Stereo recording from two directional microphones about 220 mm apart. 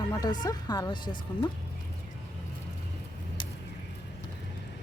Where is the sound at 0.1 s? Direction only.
20° left (ahead or behind).